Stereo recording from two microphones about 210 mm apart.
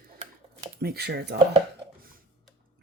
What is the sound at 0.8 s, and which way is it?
Speech, 50° right (ahead or behind).